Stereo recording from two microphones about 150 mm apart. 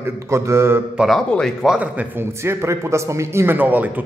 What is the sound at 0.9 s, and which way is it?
Speech, centre (ahead or behind).